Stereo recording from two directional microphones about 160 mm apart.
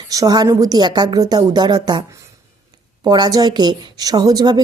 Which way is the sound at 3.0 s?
25° right (ahead or behind).